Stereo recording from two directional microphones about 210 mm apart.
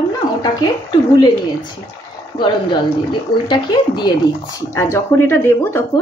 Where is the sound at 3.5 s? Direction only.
20° left (ahead or behind).